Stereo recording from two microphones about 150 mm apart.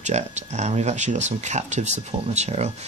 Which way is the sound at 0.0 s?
50° right (ahead or behind).